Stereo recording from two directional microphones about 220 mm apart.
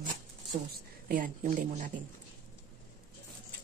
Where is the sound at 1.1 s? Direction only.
40° right (ahead or behind).